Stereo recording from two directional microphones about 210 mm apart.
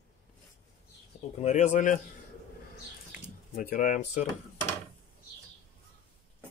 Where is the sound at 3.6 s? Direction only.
40° left (ahead or behind).